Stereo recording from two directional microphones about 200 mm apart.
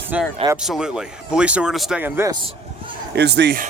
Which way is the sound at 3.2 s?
55° right (ahead or behind).